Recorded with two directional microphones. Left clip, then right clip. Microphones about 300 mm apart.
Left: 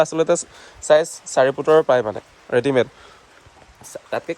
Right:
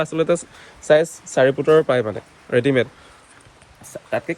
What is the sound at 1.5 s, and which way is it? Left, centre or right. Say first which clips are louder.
Speech: left 1 dB; centre.